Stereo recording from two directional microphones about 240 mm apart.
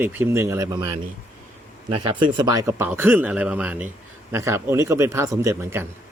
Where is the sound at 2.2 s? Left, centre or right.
Centre.